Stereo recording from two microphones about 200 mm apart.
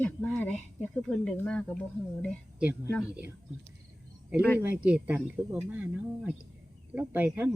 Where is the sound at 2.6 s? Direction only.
10° right (ahead or behind).